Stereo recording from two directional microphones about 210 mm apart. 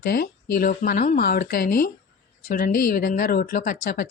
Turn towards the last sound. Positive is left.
turn(degrees=40)  # may be behind; listen again after turning